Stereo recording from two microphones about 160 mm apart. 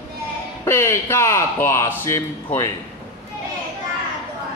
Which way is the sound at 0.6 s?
15° left (ahead or behind).